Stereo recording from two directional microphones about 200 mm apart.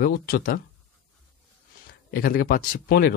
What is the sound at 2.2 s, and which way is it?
Speech, 45° left (ahead or behind).